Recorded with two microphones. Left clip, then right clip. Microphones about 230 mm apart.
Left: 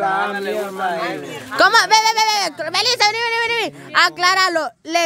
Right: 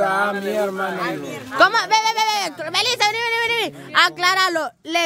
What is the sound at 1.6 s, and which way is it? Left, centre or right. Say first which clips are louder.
Speech: left 3 dB; centre.